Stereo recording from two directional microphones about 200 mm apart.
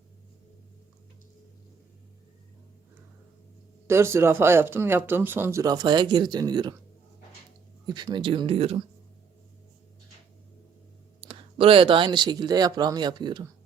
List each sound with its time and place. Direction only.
3.8 s speech: 15° right (ahead or behind)
7.9 s speech: 20° right (ahead or behind)
11.2 s speech: 25° right (ahead or behind)